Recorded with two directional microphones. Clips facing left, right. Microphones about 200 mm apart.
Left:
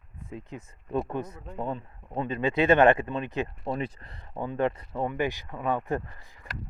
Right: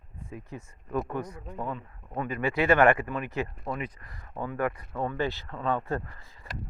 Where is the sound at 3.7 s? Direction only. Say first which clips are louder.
Left 3 dB; 30° left (ahead or behind).